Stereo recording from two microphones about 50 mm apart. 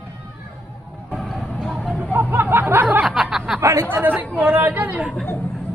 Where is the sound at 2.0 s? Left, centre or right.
Right.